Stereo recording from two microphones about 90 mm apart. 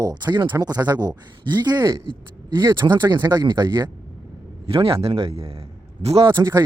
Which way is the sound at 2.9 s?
55° right (ahead or behind).